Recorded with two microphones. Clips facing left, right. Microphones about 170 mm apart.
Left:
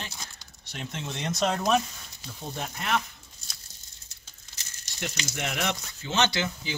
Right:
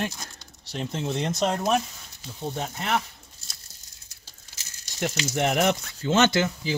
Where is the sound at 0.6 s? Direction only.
35° right (ahead or behind).